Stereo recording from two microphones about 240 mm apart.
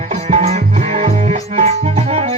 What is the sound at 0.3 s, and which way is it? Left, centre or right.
Music, right.